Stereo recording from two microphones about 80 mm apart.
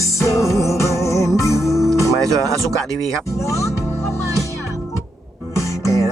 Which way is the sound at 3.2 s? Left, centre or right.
Left.